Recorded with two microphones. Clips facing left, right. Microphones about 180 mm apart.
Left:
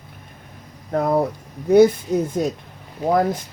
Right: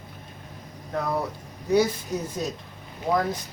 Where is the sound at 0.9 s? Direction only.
50° left (ahead or behind).